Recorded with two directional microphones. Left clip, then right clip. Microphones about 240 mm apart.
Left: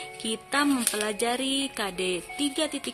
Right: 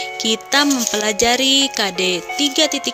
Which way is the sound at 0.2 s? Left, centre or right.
Right.